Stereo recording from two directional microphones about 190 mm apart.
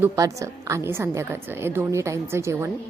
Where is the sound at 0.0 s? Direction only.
15° right (ahead or behind).